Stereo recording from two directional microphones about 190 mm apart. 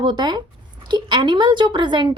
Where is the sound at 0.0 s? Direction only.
25° right (ahead or behind).